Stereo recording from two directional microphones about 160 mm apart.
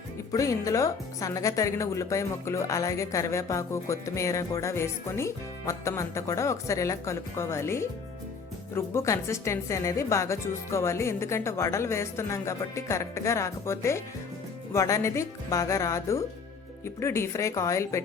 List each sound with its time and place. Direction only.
0.3 s a woman's voice: 20° left (ahead or behind)